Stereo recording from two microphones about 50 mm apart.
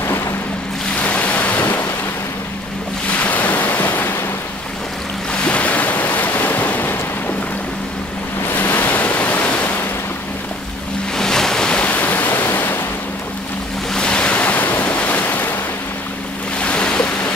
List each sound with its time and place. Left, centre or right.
0.9 s waves: left
3.1 s waves: left
5.3 s waves: left
8.5 s waves: left
11.1 s waves: centre
11.8 s stream: left
13.9 s waves: left
14.4 s waves: left
16.6 s waves: left